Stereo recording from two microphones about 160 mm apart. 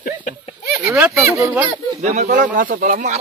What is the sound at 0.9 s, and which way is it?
Speech, 15° right (ahead or behind).